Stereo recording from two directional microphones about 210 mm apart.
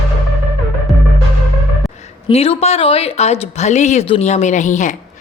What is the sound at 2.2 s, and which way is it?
Speech, 30° left (ahead or behind).